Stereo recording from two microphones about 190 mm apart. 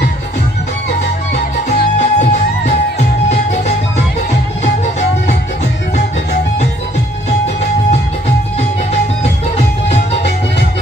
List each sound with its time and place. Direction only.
1.7 s music: 40° left (ahead or behind)
9.2 s music: 35° left (ahead or behind)